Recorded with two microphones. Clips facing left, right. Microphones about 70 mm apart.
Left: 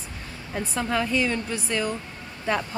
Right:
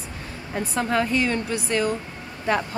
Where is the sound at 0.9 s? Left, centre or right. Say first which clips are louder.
Right 2 dB; right.